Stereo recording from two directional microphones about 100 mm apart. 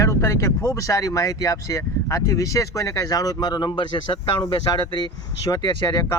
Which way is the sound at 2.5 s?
35° left (ahead or behind).